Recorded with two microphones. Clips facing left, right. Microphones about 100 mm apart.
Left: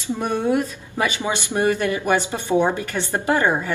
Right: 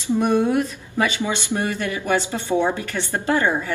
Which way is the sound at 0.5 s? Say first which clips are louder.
Left 1 dB; 20° left (ahead or behind).